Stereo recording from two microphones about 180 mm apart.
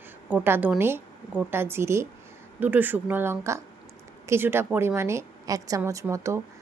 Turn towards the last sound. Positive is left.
turn(degrees=-15)  # may be behind; listen again after turning